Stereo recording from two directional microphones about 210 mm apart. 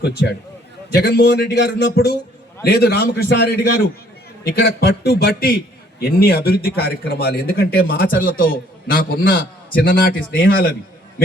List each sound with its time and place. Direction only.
0.9 s speech: 50° left (ahead or behind)